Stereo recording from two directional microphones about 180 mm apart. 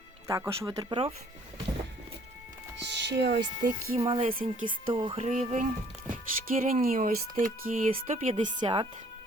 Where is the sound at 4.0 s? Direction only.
30° right (ahead or behind).